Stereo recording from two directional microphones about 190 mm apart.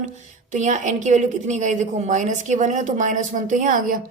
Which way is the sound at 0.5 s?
40° right (ahead or behind).